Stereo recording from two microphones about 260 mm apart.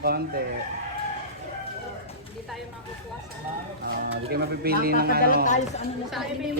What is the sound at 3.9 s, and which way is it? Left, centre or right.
A woman's voice, right.